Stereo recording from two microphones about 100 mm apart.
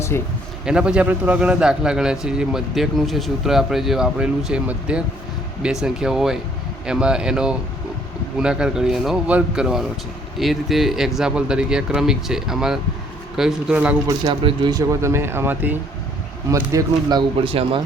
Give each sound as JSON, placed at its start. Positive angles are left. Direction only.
{"t": 0.1, "sound": "speech", "side_deg": 25}
{"t": 0.6, "sound": "a man's voice", "side_deg": -10}
{"t": 14.7, "sound": "speech", "side_deg": -35}
{"t": 16.5, "sound": "speech", "side_deg": -35}
{"t": 17.4, "sound": "speech", "side_deg": -65}